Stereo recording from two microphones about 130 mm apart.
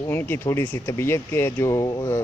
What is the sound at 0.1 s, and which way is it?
Speech, 15° left (ahead or behind).